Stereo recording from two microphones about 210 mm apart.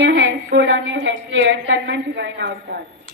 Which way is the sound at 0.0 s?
60° right (ahead or behind).